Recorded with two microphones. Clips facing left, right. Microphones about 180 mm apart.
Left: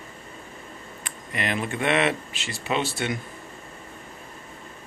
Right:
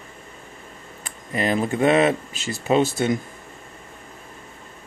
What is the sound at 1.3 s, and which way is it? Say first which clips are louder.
Speech: right 6 dB; 35° right (ahead or behind).